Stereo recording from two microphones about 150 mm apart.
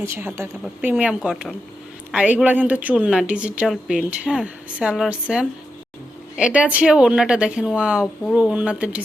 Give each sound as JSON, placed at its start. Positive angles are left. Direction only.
{"t": 0.0, "sound": "a woman's voice", "side_deg": -15}